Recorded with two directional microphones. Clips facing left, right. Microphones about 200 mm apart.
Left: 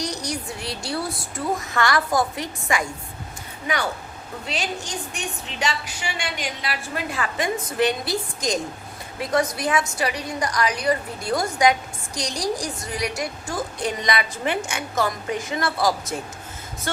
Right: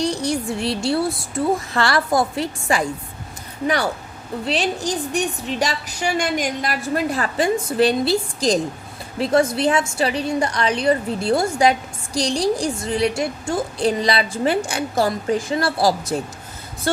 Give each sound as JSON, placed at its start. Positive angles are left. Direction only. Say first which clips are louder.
{"t": 0.0, "sound": "a woman's voice", "louder": "right 7 dB", "side_deg": -25}
{"t": 4.4, "sound": "a woman's voice", "louder": "right 8 dB", "side_deg": -35}